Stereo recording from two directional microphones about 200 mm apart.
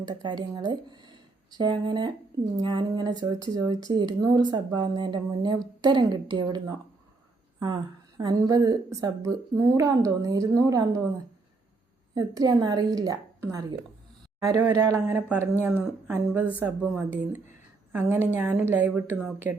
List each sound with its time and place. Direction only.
0.0 s speech: 20° right (ahead or behind)
8.2 s a woman's voice: 20° right (ahead or behind)
12.1 s a woman's voice: 20° right (ahead or behind)